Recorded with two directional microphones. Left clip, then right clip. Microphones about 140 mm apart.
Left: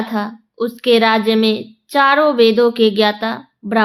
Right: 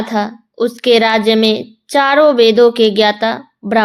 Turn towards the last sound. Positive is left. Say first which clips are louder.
# right 5 dB
turn(degrees=-45)  # may be behind; listen again after turning